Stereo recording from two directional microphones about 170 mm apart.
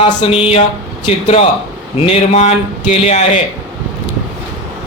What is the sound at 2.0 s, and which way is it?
A man's voice, 40° left (ahead or behind).